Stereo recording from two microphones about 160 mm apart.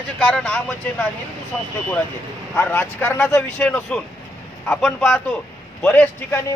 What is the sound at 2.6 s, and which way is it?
A man's voice, 15° left (ahead or behind).